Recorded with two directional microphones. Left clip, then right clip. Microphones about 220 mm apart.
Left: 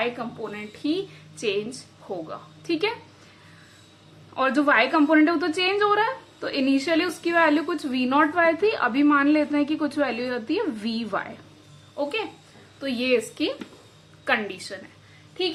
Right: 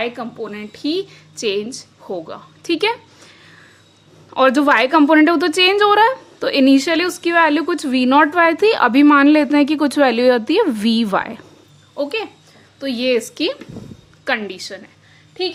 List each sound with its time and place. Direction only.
0.0 s a woman's voice: 40° right (ahead or behind)
4.4 s a woman's voice: 45° right (ahead or behind)